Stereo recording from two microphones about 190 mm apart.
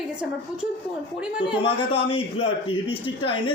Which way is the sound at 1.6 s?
30° left (ahead or behind).